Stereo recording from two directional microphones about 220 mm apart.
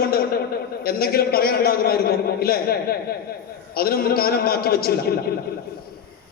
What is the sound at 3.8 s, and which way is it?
A man's voice, 45° left (ahead or behind).